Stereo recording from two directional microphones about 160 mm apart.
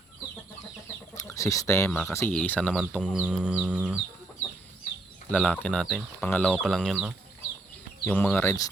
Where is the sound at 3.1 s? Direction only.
5° right (ahead or behind).